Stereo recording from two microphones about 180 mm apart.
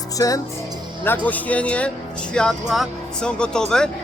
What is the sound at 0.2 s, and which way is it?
Speech, 20° left (ahead or behind).